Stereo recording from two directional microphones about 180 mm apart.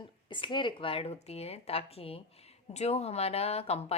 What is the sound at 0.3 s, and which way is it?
A woman's voice, 25° left (ahead or behind).